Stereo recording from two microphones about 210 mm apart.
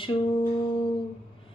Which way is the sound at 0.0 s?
25° left (ahead or behind).